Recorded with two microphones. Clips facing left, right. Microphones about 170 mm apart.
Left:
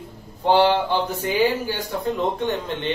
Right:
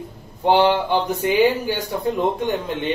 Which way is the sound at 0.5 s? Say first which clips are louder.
Right 1 dB; 15° right (ahead or behind).